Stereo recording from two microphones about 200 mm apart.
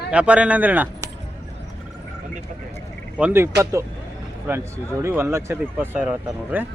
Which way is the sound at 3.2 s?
10° right (ahead or behind).